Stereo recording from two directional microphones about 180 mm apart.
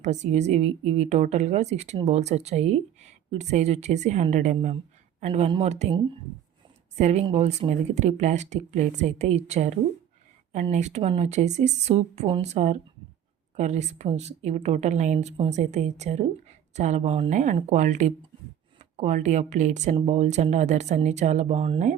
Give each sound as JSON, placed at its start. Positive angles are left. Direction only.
{"t": 0.0, "sound": "speech", "side_deg": -40}
{"t": 6.9, "sound": "speech", "side_deg": -40}